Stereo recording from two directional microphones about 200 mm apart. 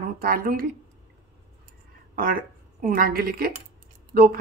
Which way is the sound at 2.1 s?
45° right (ahead or behind).